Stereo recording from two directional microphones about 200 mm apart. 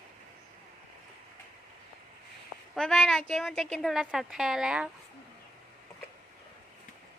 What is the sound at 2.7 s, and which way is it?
A woman's voice, 5° left (ahead or behind).